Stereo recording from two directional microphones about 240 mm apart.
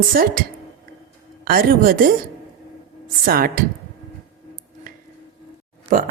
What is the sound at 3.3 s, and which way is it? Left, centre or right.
Speech, right.